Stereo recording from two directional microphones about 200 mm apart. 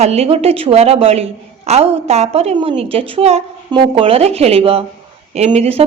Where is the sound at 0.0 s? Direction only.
30° right (ahead or behind).